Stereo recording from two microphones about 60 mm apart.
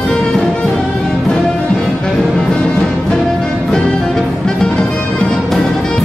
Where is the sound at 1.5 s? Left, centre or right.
Centre.